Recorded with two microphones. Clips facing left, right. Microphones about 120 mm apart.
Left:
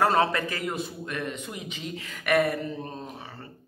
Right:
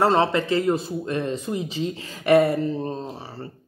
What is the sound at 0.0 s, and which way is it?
Speech, 25° right (ahead or behind).